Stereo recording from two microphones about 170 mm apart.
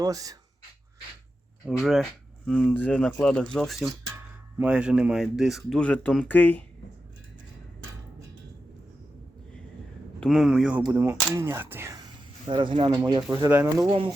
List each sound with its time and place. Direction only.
0.0 s speech: 20° right (ahead or behind)
1.6 s speech: centre (ahead or behind)
10.2 s speech: centre (ahead or behind)
12.5 s speech: 30° right (ahead or behind); by 13.8 s 15° right (ahead or behind)
13.8 s speech: 30° right (ahead or behind)